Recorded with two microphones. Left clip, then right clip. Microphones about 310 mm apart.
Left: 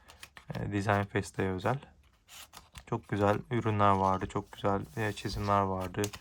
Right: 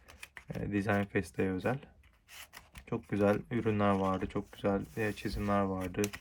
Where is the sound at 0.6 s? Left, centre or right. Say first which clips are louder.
Left 2 dB; left.